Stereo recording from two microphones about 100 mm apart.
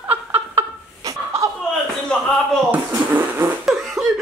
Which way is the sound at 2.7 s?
20° right (ahead or behind).